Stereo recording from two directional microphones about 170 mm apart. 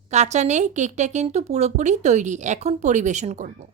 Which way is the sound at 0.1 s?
40° right (ahead or behind).